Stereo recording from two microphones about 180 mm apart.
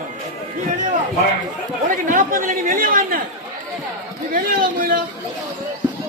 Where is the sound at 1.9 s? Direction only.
45° right (ahead or behind).